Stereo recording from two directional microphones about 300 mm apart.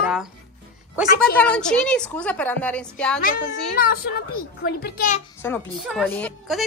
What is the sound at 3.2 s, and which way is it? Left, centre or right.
A child's voice, left.